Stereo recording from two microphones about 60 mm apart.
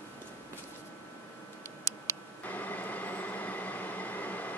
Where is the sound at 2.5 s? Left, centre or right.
Left.